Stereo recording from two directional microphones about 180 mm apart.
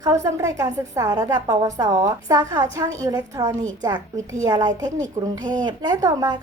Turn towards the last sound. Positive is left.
turn(degrees=-20)  # may be behind; listen again after turning